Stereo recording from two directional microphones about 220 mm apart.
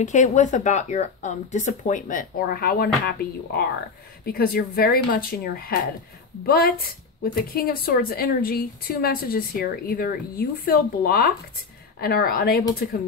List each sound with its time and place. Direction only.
0.0 s a woman's voice: 35° left (ahead or behind)